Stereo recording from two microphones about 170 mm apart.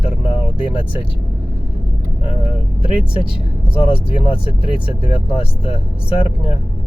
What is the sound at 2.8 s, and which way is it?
Speech, 35° left (ahead or behind).